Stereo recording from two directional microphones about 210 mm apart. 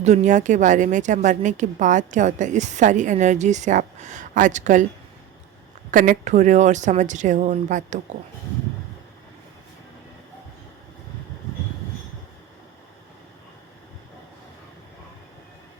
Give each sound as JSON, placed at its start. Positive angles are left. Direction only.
{"t": 0.0, "sound": "a woman's voice", "side_deg": -35}
{"t": 5.9, "sound": "a woman's voice", "side_deg": -40}